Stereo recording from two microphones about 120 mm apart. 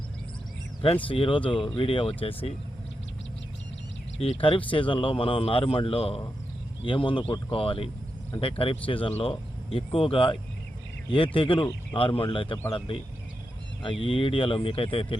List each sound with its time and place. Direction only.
1.0 s speech: 45° left (ahead or behind)
4.2 s speech: 50° left (ahead or behind)
14.0 s speech: 45° left (ahead or behind)